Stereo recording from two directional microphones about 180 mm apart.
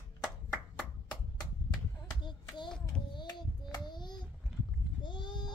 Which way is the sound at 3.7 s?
25° left (ahead or behind).